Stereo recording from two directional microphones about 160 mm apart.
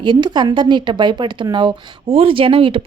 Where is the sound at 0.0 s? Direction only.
30° right (ahead or behind).